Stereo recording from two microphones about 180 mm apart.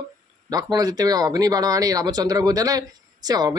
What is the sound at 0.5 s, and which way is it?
Speech, 20° right (ahead or behind).